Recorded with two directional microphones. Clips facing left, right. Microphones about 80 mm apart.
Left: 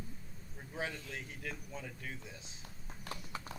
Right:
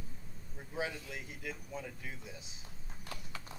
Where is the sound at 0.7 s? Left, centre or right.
Centre.